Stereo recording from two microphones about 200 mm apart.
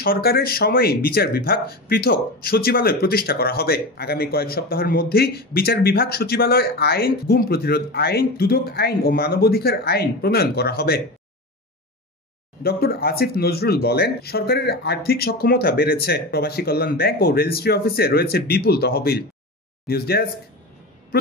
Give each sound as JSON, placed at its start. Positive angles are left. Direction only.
{"t": 0.0, "sound": "speech", "side_deg": 50}
{"t": 12.6, "sound": "speech", "side_deg": 50}